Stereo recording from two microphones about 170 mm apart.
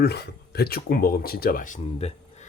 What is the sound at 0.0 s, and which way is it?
Speech, 70° left (ahead or behind).